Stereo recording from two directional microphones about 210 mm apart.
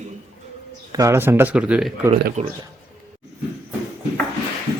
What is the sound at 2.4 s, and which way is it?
Speech, 30° right (ahead or behind).